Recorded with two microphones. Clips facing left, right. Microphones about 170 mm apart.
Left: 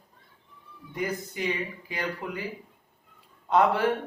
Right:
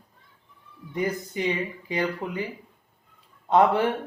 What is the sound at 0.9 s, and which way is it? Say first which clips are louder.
Speech: right 4 dB; 20° right (ahead or behind).